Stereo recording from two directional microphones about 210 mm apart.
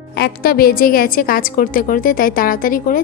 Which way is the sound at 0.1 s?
50° left (ahead or behind).